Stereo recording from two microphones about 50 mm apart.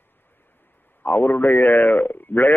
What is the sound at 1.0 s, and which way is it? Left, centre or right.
A woman's voice, left.